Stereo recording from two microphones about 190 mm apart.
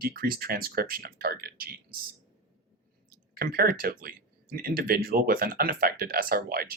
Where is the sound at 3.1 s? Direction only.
55° right (ahead or behind).